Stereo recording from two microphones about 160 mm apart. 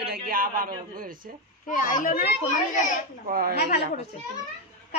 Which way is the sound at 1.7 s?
55° left (ahead or behind).